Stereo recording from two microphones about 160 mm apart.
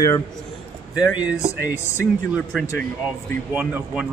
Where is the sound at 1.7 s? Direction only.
15° left (ahead or behind).